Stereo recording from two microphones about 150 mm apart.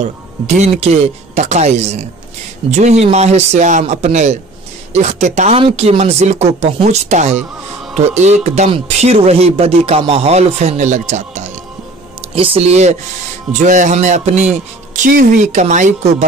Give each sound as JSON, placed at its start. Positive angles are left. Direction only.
{"t": 0.0, "sound": "speech", "side_deg": -50}
{"t": 12.2, "sound": "speech", "side_deg": -40}